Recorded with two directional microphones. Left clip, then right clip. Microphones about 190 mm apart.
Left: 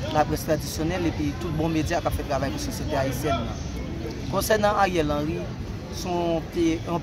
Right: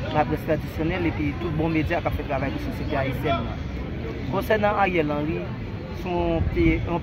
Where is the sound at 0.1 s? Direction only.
10° left (ahead or behind).